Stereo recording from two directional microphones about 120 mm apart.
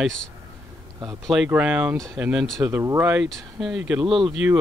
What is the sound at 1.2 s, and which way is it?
Speech, centre (ahead or behind).